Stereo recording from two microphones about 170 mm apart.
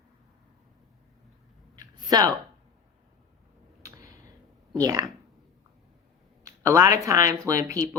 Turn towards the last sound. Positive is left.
turn(degrees=-20)  # may be behind; listen again after turning